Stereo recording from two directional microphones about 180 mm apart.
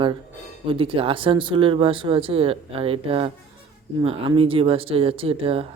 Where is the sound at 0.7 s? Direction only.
30° right (ahead or behind).